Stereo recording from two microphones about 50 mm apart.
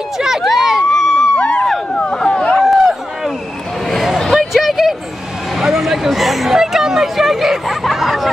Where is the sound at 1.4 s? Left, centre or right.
Left.